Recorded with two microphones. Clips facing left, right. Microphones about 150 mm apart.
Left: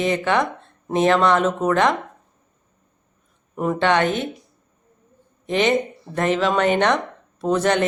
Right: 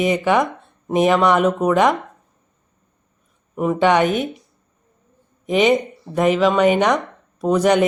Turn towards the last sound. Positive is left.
turn(degrees=-10)  # may be behind; listen again after turning